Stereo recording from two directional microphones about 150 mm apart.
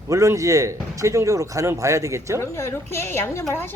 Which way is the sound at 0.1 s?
20° right (ahead or behind).